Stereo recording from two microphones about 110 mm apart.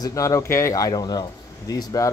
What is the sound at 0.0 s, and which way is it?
Speech, 30° left (ahead or behind).